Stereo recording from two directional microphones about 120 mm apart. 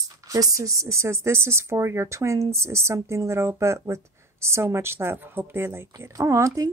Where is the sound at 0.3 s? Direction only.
30° right (ahead or behind).